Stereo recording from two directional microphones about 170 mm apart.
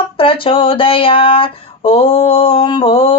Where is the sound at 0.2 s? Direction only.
30° left (ahead or behind).